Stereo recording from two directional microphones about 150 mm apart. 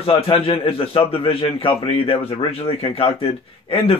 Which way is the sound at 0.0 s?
40° left (ahead or behind).